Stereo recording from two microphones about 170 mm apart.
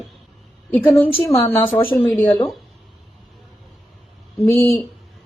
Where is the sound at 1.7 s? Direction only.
35° left (ahead or behind).